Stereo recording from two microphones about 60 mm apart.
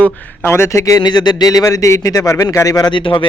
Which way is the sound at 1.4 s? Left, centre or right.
Left.